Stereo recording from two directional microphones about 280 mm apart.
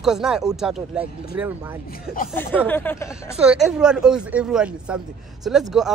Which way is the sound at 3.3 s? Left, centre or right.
Centre.